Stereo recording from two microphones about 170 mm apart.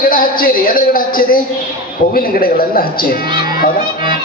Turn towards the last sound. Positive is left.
turn(degrees=60)  # may be behind; listen again after turning